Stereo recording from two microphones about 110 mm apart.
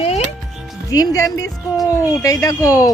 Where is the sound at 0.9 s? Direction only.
35° left (ahead or behind).